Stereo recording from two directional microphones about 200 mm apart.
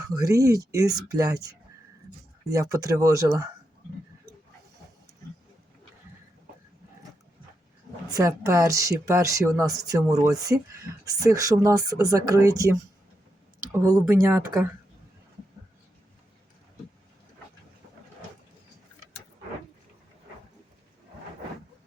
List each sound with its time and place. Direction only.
0.0 s speech: 15° right (ahead or behind)
2.5 s speech: 15° right (ahead or behind)
8.1 s speech: 15° right (ahead or behind)
13.7 s speech: 15° right (ahead or behind)